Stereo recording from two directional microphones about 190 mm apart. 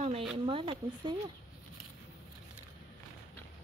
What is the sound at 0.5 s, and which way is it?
Speech, 25° right (ahead or behind).